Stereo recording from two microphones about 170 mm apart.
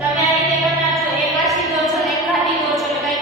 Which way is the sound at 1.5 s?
Centre (ahead or behind).